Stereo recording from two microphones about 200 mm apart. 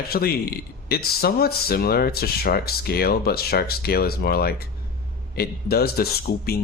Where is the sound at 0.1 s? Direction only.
50° left (ahead or behind).